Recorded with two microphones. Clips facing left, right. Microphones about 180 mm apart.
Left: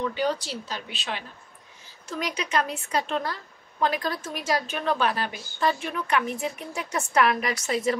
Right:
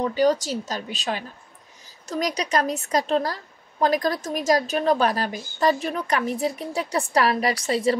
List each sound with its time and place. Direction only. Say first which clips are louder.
0.0 s a woman's voice: right 6 dB; 40° right (ahead or behind)